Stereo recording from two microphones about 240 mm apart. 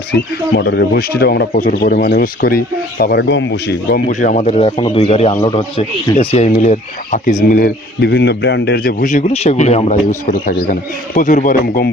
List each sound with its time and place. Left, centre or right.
0.1 s speech: left
4.1 s a man's voice: left